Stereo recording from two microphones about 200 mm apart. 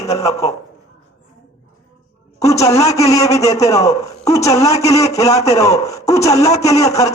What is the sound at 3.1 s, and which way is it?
A man's voice, 15° left (ahead or behind).